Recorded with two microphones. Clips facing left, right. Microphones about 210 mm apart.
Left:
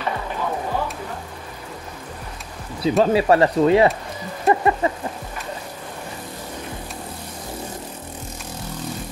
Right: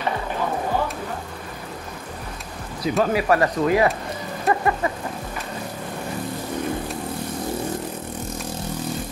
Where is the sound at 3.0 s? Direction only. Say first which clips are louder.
Left 3 dB; 30° left (ahead or behind).